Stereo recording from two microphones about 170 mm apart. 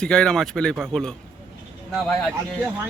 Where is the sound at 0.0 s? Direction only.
5° left (ahead or behind).